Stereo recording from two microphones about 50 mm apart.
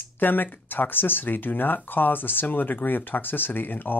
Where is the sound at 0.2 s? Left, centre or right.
Left.